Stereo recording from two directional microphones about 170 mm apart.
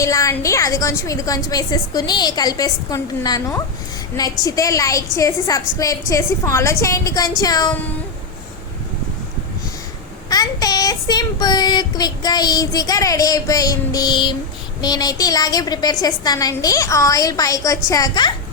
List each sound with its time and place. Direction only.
0.0 s a woman's voice: 20° left (ahead or behind)
10.2 s child singing: 20° left (ahead or behind)
14.8 s a woman's voice: 25° left (ahead or behind)